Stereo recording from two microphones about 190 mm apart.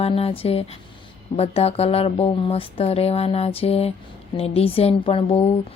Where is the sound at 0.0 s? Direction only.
30° left (ahead or behind).